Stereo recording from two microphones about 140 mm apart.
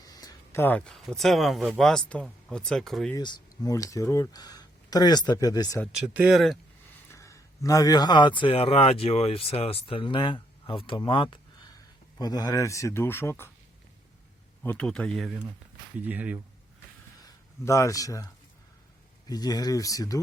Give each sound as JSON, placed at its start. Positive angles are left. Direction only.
{"t": 0.0, "sound": "a sound", "side_deg": 25}
{"t": 0.6, "sound": "speech", "side_deg": 10}
{"t": 3.2, "sound": "speech", "side_deg": 30}
{"t": 6.1, "sound": "speech", "side_deg": -5}
{"t": 7.1, "sound": "speech", "side_deg": 20}
{"t": 14.6, "sound": "speech", "side_deg": 10}
{"t": 17.2, "sound": "speech", "side_deg": 20}
{"t": 19.3, "sound": "speech", "side_deg": 25}